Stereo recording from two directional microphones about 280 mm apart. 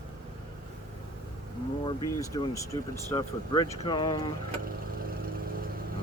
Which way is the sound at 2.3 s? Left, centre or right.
Centre.